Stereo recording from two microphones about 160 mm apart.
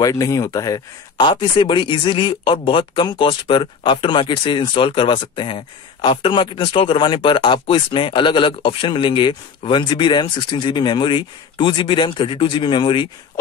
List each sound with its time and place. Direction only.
0.0 s speech: 20° left (ahead or behind)